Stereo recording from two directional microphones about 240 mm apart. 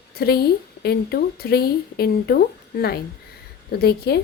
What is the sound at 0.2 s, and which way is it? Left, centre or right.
A woman's voice, left.